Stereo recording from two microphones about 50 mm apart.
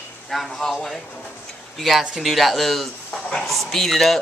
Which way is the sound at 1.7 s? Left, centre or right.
Centre.